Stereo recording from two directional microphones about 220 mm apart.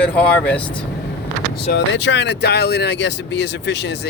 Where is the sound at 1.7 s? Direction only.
55° left (ahead or behind).